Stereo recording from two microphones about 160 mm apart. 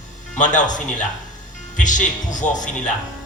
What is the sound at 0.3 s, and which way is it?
Speech, 50° left (ahead or behind).